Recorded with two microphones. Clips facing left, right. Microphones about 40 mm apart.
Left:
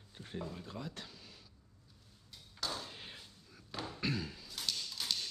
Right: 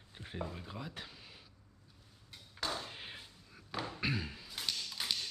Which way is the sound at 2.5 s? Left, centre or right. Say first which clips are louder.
Right 2 dB; right.